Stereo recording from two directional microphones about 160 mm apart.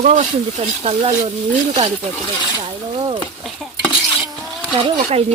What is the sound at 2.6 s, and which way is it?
Speech, 30° right (ahead or behind).